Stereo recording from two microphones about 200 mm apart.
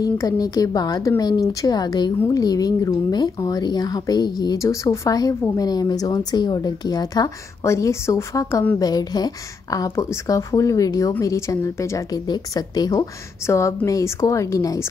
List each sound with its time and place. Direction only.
0.0 s speech: 20° left (ahead or behind)